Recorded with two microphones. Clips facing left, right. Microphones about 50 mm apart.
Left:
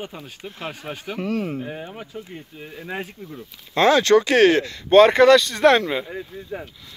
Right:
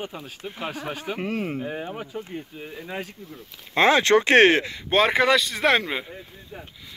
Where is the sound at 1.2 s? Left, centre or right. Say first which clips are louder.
Left 5 dB; right.